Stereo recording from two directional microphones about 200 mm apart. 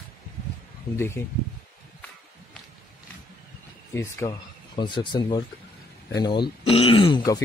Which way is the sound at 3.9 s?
15° left (ahead or behind).